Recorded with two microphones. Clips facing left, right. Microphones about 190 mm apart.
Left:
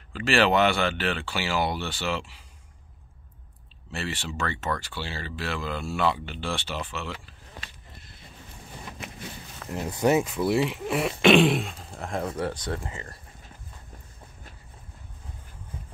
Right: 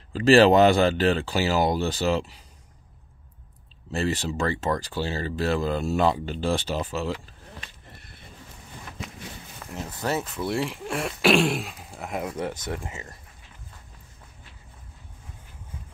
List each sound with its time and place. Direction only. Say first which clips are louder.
0.1 s speech: right 7 dB; 35° right (ahead or behind)
3.9 s speech: right 7 dB; 40° right (ahead or behind)
9.8 s speech: left 6 dB; 20° left (ahead or behind); by 12.3 s 5° right (ahead or behind)
12.4 s speech: even; 15° right (ahead or behind)